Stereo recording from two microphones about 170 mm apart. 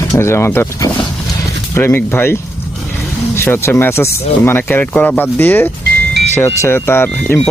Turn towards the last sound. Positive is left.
turn(degrees=15)  # may be behind; listen again after turning